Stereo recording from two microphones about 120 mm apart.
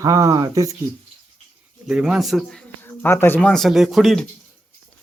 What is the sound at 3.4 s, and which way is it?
Speech, 5° left (ahead or behind).